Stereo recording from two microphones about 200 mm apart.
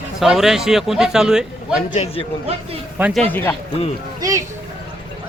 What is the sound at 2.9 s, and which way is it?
Speech, 5° right (ahead or behind).